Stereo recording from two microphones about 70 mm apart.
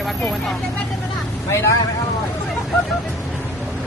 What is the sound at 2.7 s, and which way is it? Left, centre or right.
Speech, centre.